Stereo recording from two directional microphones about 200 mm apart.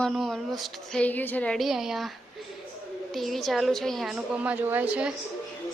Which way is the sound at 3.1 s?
Centre (ahead or behind).